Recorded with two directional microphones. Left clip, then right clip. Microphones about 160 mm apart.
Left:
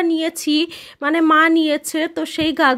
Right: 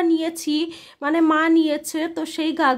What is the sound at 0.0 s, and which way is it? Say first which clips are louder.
Speech: left 2 dB; 20° left (ahead or behind).